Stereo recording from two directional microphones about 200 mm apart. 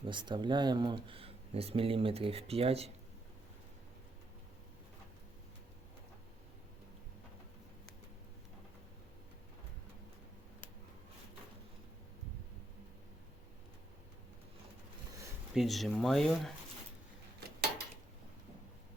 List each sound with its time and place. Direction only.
0.0 s speech: 25° right (ahead or behind)
15.5 s speech: centre (ahead or behind)